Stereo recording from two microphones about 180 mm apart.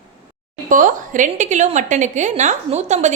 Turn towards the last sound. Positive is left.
turn(degrees=-40)  # may be behind; listen again after turning